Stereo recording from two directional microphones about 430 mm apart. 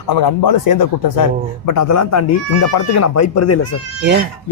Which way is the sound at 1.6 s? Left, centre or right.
Left.